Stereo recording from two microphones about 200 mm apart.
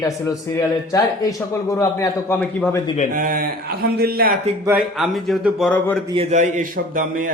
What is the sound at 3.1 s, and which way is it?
A man's voice, 45° right (ahead or behind).